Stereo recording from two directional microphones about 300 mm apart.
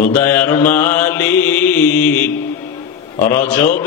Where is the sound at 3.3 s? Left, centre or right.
Centre.